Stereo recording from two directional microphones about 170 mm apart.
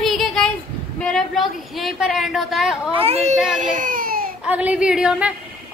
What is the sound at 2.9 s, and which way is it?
Speech, 35° right (ahead or behind).